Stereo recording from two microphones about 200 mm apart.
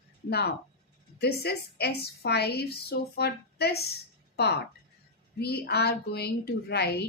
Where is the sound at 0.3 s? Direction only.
55° left (ahead or behind).